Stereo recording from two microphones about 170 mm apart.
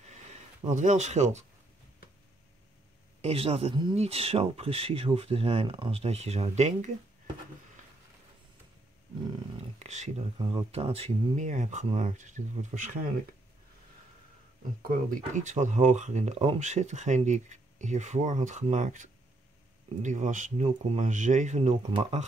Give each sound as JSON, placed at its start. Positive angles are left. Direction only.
{"t": 0.0, "sound": "a sound", "side_deg": -40}
{"t": 3.2, "sound": "speech", "side_deg": -35}
{"t": 9.8, "sound": "speech", "side_deg": -45}
{"t": 10.4, "sound": "speech", "side_deg": -30}
{"t": 14.8, "sound": "speech", "side_deg": -55}